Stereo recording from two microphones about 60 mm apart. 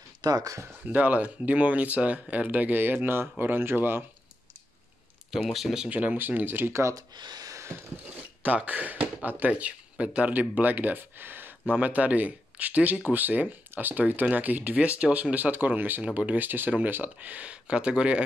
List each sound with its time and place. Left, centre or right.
0.3 s speech: right
0.9 s speech: right
5.4 s speech: centre
5.9 s speech: right
6.7 s speech: right
8.4 s speech: right